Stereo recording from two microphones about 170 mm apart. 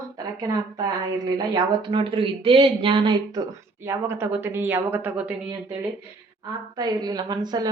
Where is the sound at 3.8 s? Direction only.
15° right (ahead or behind).